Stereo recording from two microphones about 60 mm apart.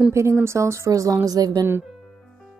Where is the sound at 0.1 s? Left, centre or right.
Right.